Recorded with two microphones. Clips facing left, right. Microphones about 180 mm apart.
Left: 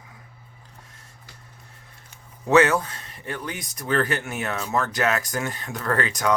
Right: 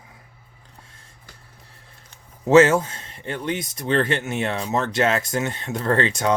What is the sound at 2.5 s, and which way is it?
Speech, 25° right (ahead or behind).